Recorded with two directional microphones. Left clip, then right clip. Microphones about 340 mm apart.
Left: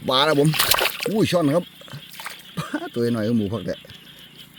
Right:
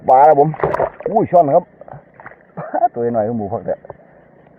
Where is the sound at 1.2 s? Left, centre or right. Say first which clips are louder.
Right 9 dB; right.